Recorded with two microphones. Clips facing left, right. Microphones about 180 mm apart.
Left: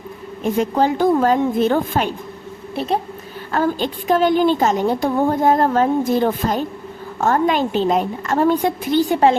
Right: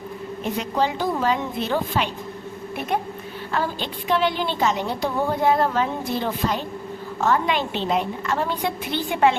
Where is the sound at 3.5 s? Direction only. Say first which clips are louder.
Left 7 dB; 45° left (ahead or behind).